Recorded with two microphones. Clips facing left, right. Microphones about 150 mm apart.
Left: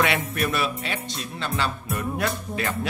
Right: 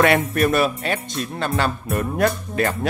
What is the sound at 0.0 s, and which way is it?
Speech, 50° right (ahead or behind).